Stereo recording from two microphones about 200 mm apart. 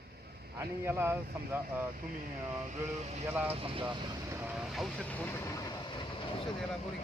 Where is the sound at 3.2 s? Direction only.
10° right (ahead or behind).